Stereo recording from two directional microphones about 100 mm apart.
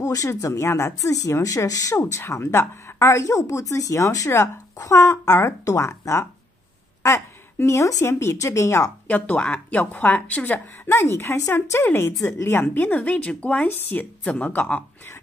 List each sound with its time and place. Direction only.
0.0 s a woman's voice: 35° left (ahead or behind)
9.0 s a woman's voice: 15° left (ahead or behind)
10.9 s a woman's voice: 30° left (ahead or behind)